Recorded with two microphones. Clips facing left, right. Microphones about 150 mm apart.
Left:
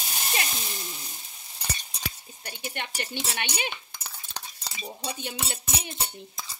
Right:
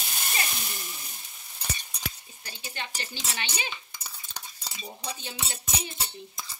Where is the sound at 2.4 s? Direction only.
55° left (ahead or behind).